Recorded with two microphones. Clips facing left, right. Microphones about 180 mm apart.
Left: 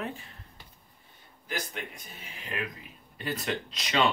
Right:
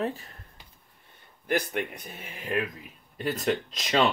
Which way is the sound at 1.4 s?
60° right (ahead or behind).